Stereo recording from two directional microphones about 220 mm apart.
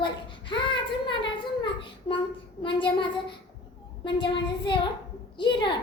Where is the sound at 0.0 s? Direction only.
20° left (ahead or behind).